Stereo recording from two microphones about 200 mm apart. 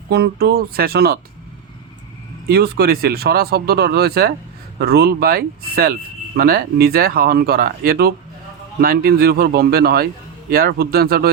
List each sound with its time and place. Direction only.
0.1 s speech: 50° right (ahead or behind)
2.5 s speech: 50° right (ahead or behind)